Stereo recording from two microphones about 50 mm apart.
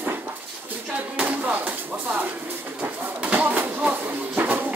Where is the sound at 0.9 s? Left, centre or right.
Right.